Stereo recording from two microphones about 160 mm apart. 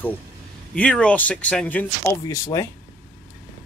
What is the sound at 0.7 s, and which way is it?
Speech, 5° left (ahead or behind).